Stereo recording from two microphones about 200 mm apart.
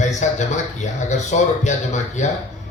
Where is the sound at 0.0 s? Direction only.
35° left (ahead or behind).